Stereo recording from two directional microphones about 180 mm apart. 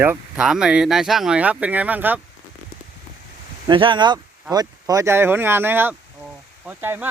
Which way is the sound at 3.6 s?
25° right (ahead or behind).